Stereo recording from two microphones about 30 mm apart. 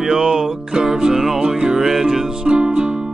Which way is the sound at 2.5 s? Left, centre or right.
Right.